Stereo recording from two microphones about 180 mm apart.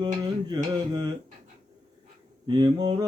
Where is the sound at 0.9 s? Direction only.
25° right (ahead or behind).